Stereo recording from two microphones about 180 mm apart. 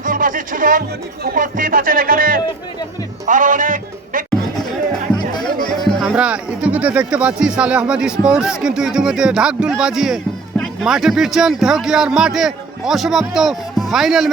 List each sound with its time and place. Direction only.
0.0 s speech: 50° right (ahead or behind)
5.4 s speech: centre (ahead or behind)